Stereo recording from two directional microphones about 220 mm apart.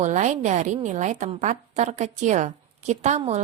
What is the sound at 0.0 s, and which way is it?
A woman's voice, 35° right (ahead or behind).